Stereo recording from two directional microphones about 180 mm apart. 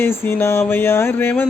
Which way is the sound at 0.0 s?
10° left (ahead or behind).